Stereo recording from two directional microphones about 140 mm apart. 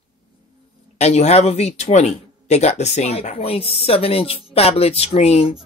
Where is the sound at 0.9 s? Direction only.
50° left (ahead or behind).